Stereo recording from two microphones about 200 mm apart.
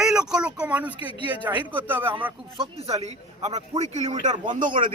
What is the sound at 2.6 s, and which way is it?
A man's voice, 30° right (ahead or behind).